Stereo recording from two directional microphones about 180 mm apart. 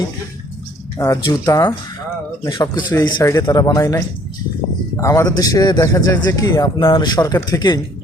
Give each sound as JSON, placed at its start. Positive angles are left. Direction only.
{"t": 0.9, "sound": "a man's voice", "side_deg": 20}